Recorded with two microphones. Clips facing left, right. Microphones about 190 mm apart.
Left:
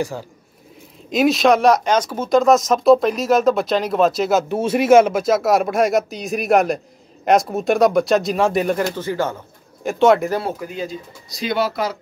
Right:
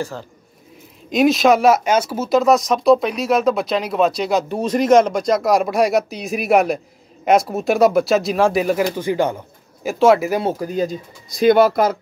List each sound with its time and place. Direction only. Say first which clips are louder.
1.1 s speech: right 1 dB; centre (ahead or behind)
8.9 s speech: right 3 dB; 15° right (ahead or behind)
9.8 s speech: right 1 dB; centre (ahead or behind)
10.6 s speech: right 6 dB; 40° right (ahead or behind)